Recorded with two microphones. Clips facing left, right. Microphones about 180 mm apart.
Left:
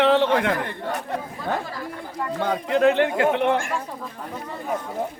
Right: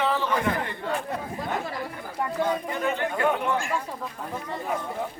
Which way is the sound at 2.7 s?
85° left.